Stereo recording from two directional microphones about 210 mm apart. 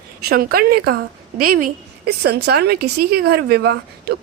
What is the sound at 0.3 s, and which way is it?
A woman's voice, 45° right (ahead or behind).